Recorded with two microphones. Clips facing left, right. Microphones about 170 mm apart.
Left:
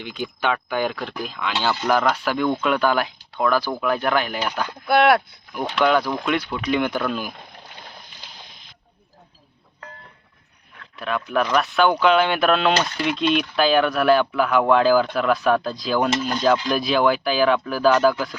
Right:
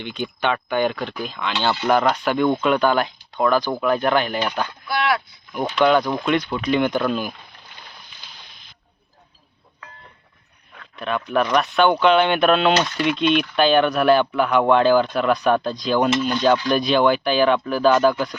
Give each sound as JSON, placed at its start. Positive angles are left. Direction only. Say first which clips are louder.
{"t": 0.0, "sound": "speech", "louder": "right 1 dB", "side_deg": 5}
{"t": 4.9, "sound": "speech", "louder": "left 7 dB", "side_deg": 55}
{"t": 5.8, "sound": "speech", "louder": "right 2 dB", "side_deg": 5}
{"t": 10.9, "sound": "speech", "louder": "right 1 dB", "side_deg": 0}